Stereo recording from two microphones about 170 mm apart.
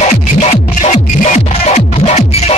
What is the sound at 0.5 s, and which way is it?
Music, 40° left (ahead or behind).